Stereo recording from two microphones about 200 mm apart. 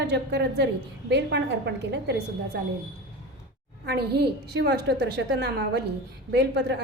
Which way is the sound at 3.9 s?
55° right (ahead or behind).